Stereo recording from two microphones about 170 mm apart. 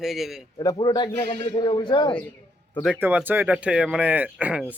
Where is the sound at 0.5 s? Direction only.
25° left (ahead or behind).